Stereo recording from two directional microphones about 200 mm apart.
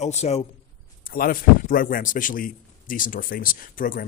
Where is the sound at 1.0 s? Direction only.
45° left (ahead or behind).